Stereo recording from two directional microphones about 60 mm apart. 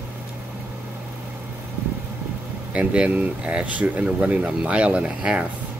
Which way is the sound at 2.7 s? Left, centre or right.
Right.